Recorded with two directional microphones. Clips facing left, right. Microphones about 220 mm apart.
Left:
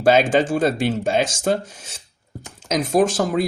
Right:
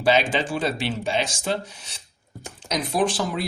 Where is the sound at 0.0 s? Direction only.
50° left (ahead or behind).